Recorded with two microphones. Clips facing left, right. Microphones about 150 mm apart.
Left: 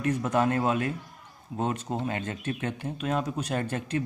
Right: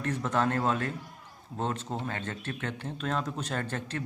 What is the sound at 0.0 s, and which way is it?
Speech, 10° left (ahead or behind).